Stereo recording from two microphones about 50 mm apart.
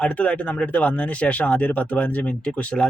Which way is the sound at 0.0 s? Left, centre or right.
Left.